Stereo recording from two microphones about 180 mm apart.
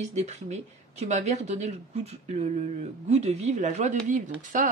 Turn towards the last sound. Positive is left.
turn(degrees=-45)  # may be behind; listen again after turning